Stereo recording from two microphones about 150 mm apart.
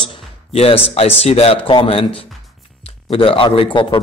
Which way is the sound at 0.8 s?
40° left (ahead or behind).